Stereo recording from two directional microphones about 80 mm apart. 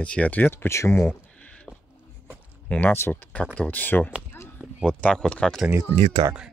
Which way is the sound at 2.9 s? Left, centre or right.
Left.